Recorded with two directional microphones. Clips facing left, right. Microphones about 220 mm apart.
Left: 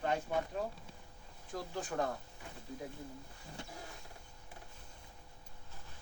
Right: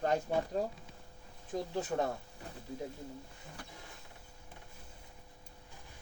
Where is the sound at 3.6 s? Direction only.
25° left (ahead or behind).